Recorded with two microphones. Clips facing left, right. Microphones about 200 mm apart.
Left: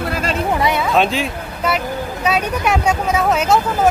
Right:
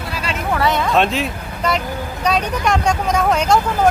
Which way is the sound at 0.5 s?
10° left (ahead or behind).